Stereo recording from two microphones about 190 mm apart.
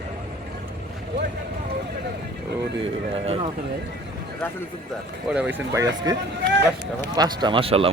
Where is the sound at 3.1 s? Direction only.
30° right (ahead or behind).